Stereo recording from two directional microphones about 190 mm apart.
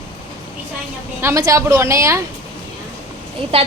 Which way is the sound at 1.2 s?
15° right (ahead or behind).